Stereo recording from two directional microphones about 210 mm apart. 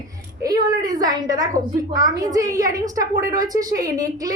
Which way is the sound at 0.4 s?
15° right (ahead or behind).